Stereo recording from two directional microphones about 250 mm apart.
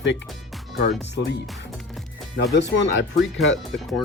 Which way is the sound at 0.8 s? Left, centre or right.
Left.